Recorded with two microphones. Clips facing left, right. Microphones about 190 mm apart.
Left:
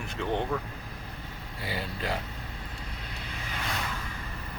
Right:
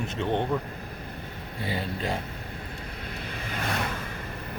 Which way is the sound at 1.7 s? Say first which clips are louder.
Right 3 dB; 25° right (ahead or behind).